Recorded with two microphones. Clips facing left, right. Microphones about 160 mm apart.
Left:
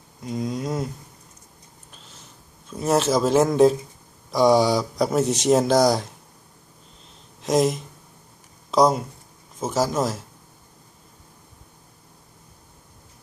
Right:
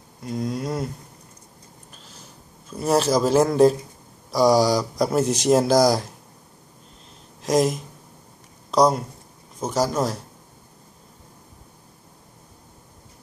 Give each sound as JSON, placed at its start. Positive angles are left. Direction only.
{"t": 0.2, "sound": "speech", "side_deg": 0}
{"t": 1.9, "sound": "a sound", "side_deg": 0}
{"t": 4.3, "sound": "speech", "side_deg": 0}
{"t": 7.4, "sound": "speech", "side_deg": 0}